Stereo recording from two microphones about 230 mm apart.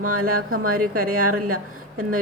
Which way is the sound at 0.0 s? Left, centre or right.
Right.